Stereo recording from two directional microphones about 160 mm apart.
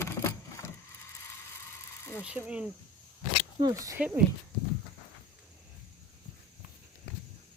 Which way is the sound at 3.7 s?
20° right (ahead or behind).